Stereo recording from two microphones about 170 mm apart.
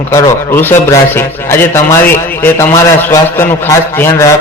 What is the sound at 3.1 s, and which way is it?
A man's voice, 15° left (ahead or behind).